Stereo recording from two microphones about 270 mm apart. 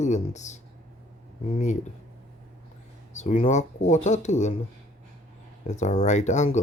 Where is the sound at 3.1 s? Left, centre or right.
Left.